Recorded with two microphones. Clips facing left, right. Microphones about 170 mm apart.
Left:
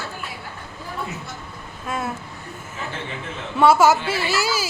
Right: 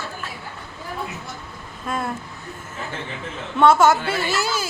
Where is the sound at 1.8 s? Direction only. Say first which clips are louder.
Right 1 dB; 5° left (ahead or behind).